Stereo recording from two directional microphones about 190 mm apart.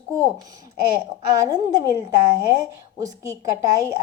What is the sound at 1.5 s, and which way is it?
A woman's voice, 20° right (ahead or behind).